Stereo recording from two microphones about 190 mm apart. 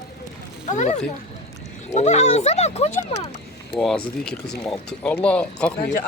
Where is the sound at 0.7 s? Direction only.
40° left (ahead or behind).